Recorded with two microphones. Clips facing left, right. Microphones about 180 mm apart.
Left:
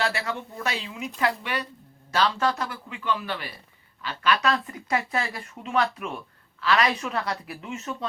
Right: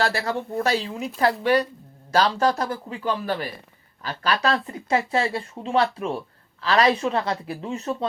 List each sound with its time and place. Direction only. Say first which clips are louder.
0.0 s speech: right 4 dB; 40° right (ahead or behind)